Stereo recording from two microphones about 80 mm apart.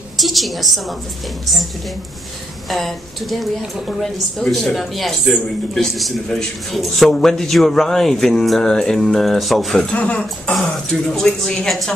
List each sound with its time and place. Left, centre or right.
0.2 s a woman's voice: centre
2.7 s a woman's voice: centre
9.9 s speech: centre
11.1 s a woman's voice: centre